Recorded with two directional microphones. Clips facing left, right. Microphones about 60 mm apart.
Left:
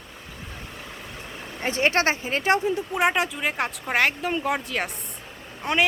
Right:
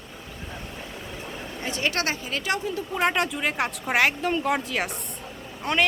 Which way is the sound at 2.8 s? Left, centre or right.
Centre.